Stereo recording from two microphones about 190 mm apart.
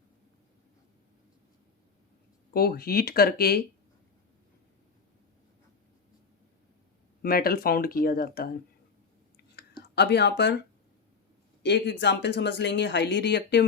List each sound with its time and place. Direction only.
2.5 s speech: 55° left (ahead or behind)
7.2 s speech: 50° left (ahead or behind)
9.6 s a sound: 60° left (ahead or behind)
11.6 s speech: 65° left (ahead or behind)